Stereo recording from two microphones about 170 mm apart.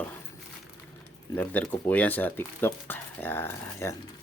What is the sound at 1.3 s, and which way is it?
Speech, 10° left (ahead or behind).